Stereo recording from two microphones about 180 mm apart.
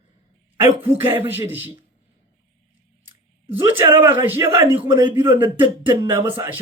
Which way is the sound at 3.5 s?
10° right (ahead or behind).